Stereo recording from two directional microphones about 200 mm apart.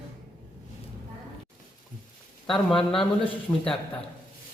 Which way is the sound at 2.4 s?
Centre (ahead or behind).